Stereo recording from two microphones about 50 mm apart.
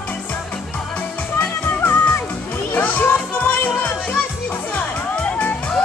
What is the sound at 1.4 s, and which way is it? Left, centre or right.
Music, left.